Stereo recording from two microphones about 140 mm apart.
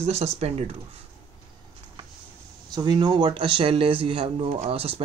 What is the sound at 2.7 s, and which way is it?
Speech, 30° right (ahead or behind).